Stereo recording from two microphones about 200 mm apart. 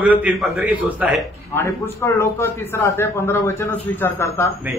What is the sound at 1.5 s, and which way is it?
A man's voice, 10° left (ahead or behind).